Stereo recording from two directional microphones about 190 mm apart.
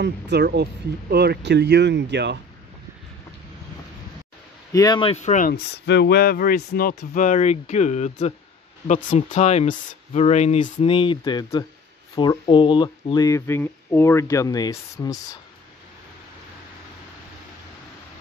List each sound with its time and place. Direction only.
0.0 s speech: 60° right (ahead or behind)
4.7 s speech: 20° left (ahead or behind); by 5.5 s 40° left (ahead or behind)
5.5 s speech: 60° left (ahead or behind); by 15.1 s 20° left (ahead or behind)